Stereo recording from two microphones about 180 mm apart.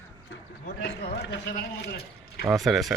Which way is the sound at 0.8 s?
70° left (ahead or behind).